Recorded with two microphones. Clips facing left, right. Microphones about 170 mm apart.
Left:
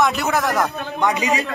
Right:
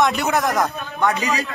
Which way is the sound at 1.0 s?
15° left (ahead or behind).